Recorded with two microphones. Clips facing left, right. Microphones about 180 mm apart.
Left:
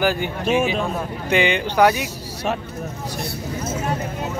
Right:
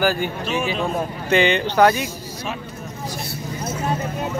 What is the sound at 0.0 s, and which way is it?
Speech, 20° left (ahead or behind).